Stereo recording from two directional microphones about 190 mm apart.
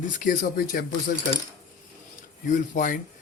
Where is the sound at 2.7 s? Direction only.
45° left (ahead or behind).